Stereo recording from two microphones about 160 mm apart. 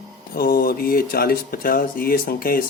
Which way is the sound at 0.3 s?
70° left (ahead or behind).